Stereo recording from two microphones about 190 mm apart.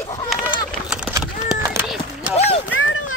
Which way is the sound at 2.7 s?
90° left.